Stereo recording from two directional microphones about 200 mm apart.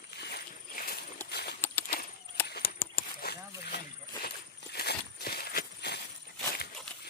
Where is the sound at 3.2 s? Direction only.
50° left (ahead or behind).